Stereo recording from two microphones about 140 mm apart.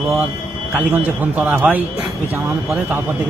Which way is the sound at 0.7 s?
10° right (ahead or behind).